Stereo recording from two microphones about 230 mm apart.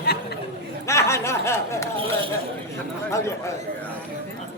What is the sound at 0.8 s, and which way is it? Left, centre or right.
A woman's voice, centre.